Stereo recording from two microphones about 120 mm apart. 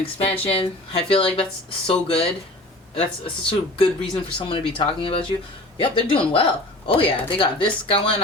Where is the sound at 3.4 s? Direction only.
50° left (ahead or behind).